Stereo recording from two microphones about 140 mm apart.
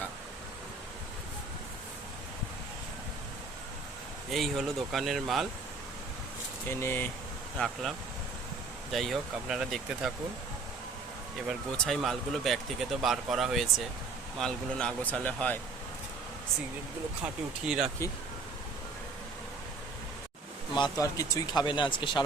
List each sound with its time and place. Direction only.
4.3 s speech: centre (ahead or behind)
6.7 s speech: 15° left (ahead or behind)
7.6 s speech: centre (ahead or behind)
11.4 s speech: centre (ahead or behind)
17.7 s speech: 5° right (ahead or behind)
20.7 s speech: 30° left (ahead or behind)